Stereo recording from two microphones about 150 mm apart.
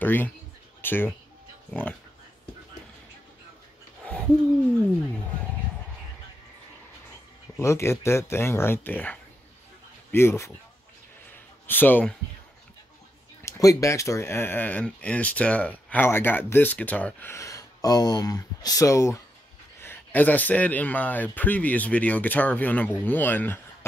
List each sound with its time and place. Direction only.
0.0 s speech: 15° left (ahead or behind)
7.5 s speech: 20° left (ahead or behind)
11.6 s speech: 10° left (ahead or behind)
13.4 s speech: 20° left (ahead or behind)